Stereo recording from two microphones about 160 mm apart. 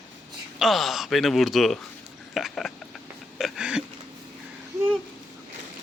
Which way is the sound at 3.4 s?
5° right (ahead or behind).